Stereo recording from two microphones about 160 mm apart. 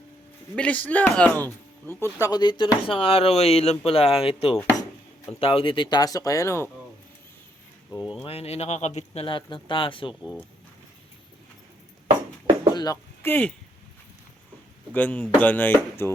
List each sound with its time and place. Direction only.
0.5 s speech: 10° left (ahead or behind)
7.9 s speech: 30° left (ahead or behind); by 9.2 s 45° left (ahead or behind)
9.2 s speech: 30° left (ahead or behind)
12.7 s a sound: 25° left (ahead or behind)
14.9 s speech: 10° left (ahead or behind)